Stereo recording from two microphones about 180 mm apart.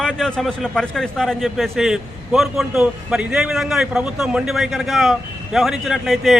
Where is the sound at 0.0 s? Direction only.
5° left (ahead or behind).